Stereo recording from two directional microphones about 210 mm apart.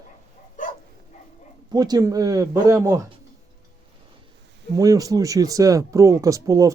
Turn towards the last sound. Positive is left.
turn(degrees=-15)  # may be behind; listen again after turning